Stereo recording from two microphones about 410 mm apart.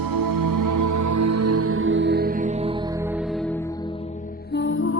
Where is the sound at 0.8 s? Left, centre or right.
Right.